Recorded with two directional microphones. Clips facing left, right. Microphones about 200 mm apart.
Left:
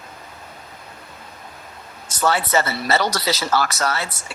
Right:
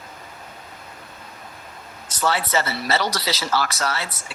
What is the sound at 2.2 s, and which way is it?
A woman's voice, 50° left (ahead or behind).